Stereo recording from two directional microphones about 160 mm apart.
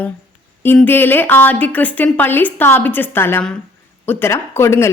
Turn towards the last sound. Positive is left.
turn(degrees=15)  # may be behind; listen again after turning